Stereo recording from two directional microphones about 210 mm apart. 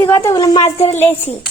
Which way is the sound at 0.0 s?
15° left (ahead or behind).